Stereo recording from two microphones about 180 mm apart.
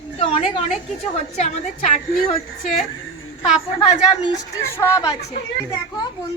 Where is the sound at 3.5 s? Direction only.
30° left (ahead or behind).